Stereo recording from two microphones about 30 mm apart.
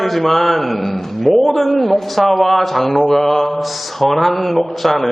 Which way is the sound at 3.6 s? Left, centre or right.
Centre.